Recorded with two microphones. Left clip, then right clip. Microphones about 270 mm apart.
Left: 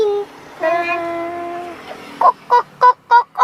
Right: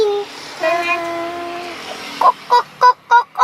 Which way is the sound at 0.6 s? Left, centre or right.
Centre.